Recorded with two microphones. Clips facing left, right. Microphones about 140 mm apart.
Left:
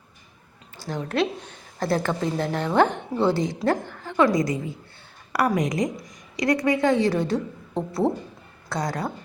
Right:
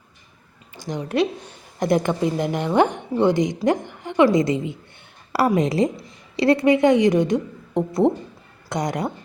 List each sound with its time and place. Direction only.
0.8 s a woman's voice: 15° right (ahead or behind)